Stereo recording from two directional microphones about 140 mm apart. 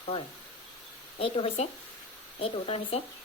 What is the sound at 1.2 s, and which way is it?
Speech, 45° left (ahead or behind).